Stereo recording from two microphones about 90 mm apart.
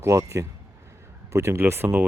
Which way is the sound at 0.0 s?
30° right (ahead or behind).